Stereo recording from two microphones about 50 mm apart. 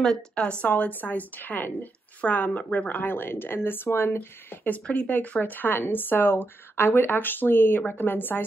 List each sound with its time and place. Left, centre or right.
0.4 s speech: left
3.0 s speech: left
4.7 s speech: left